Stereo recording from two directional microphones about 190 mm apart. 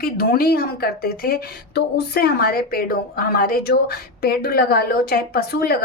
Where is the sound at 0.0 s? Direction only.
50° left (ahead or behind).